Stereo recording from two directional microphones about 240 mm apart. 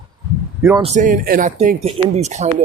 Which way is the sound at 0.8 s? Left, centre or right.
Right.